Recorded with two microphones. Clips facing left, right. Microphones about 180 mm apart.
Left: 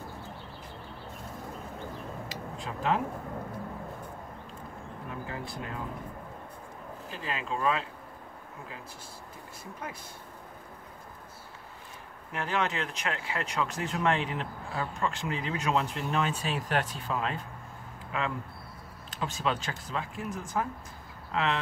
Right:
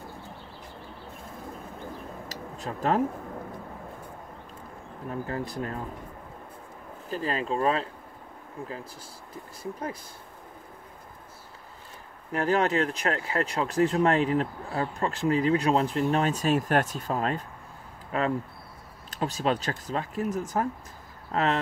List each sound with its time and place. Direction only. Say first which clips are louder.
2.2 s a sound: right 2 dB; 40° right (ahead or behind)
5.3 s speech: right 7 dB; 40° right (ahead or behind)
7.1 s speech: right 6 dB; 40° right (ahead or behind)
9.6 s speech: right 7 dB; 35° right (ahead or behind)
12.3 s speech: right 7 dB; 40° right (ahead or behind)